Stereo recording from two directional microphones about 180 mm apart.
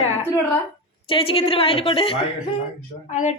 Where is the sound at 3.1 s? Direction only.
40° left (ahead or behind).